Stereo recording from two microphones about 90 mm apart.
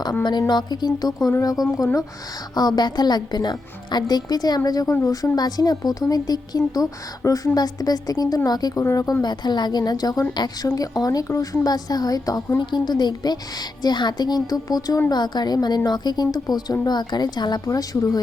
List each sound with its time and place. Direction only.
0.3 s a woman's voice: 55° left (ahead or behind)
2.6 s a woman's voice: 50° left (ahead or behind)
9.2 s a woman's voice: 55° left (ahead or behind)
17.7 s a woman's voice: 40° left (ahead or behind)